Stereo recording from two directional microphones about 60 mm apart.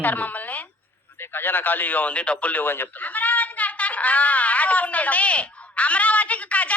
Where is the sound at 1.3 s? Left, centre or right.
Left.